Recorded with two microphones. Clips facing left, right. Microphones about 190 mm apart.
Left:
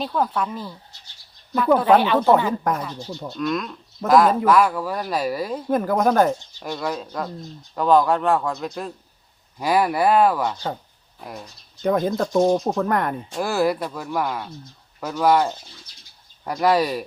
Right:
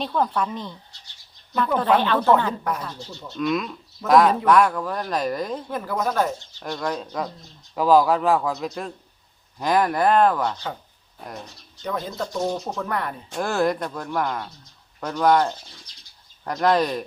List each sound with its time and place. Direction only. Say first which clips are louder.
0.0 s speech: even; 5° left (ahead or behind)
3.4 s speech: right 1 dB; centre (ahead or behind)
5.6 s speech: left 7 dB; 50° left (ahead or behind)
6.5 s speech: left 1 dB; 10° left (ahead or behind)
11.8 s speech: left 8 dB; 50° left (ahead or behind)
13.3 s speech: even; 5° left (ahead or behind)